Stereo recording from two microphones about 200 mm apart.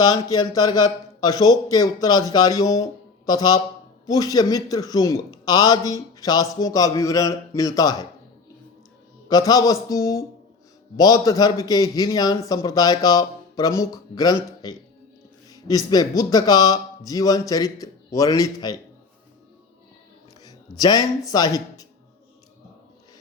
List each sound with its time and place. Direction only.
0.0 s a man's voice: 20° left (ahead or behind)
9.3 s a man's voice: 20° left (ahead or behind)
15.4 s a sound: 20° left (ahead or behind)
15.9 s a man's voice: 20° left (ahead or behind)
20.4 s speech: 20° left (ahead or behind)